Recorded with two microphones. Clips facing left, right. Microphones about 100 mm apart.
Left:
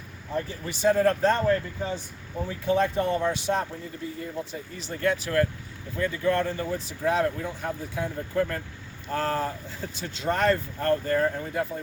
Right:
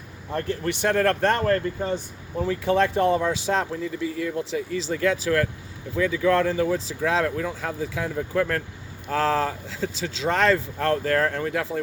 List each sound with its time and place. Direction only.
0.3 s speech: 65° right (ahead or behind)
2.5 s speech: 90° right
6.1 s speech: 90° right